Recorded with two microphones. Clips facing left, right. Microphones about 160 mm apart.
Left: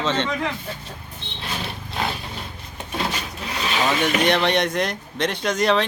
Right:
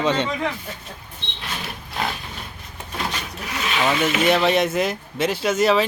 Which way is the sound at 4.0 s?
5° right (ahead or behind).